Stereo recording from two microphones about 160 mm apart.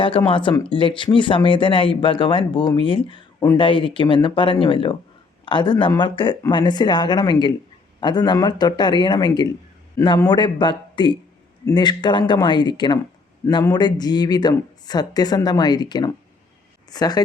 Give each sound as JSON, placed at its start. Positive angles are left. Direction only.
{"t": 0.0, "sound": "speech", "side_deg": 35}